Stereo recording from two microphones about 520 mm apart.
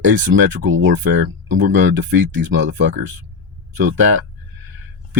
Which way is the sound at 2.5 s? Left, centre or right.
Centre.